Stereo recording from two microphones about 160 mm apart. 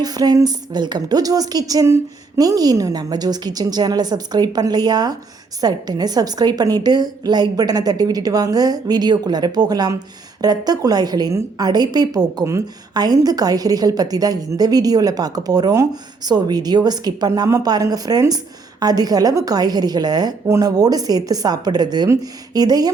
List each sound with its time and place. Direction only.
0.0 s a woman's voice: 25° right (ahead or behind)